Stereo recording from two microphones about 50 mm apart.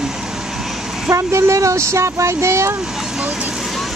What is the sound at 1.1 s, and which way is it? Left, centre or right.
Speech, right.